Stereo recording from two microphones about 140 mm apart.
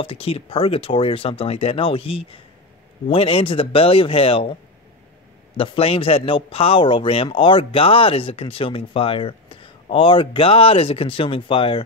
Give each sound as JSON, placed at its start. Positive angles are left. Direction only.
{"t": 0.0, "sound": "speech", "side_deg": 40}
{"t": 5.6, "sound": "speech", "side_deg": 40}